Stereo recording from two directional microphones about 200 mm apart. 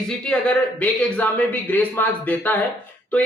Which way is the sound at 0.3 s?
5° left (ahead or behind).